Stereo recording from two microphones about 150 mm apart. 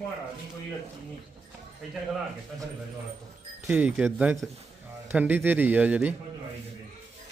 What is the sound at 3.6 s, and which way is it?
A man's voice, 10° right (ahead or behind).